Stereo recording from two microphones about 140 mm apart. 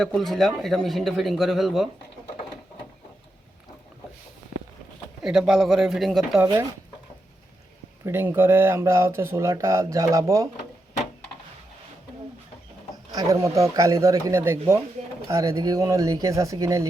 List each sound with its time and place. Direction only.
0.0 s speech: centre (ahead or behind)
5.2 s speech: centre (ahead or behind)
8.0 s speech: 15° right (ahead or behind)
13.1 s speech: 25° right (ahead or behind)